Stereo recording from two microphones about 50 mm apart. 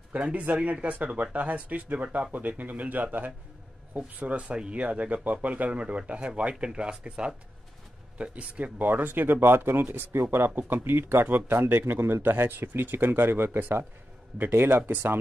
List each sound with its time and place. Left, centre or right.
0.1 s speech: right
4.4 s speech: right